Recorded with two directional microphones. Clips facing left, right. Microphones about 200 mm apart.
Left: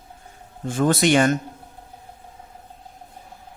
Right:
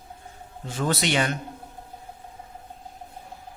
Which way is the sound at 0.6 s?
50° left (ahead or behind).